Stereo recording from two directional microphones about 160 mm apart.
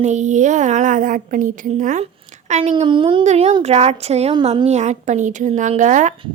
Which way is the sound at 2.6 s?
35° right (ahead or behind).